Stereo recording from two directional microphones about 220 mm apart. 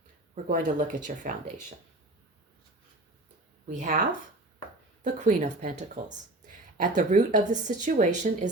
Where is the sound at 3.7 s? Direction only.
35° right (ahead or behind).